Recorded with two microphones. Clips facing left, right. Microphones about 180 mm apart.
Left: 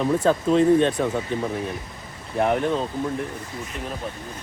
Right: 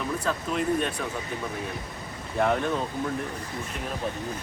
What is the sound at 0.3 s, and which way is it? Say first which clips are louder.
Speech: left 10 dB; 30° left (ahead or behind).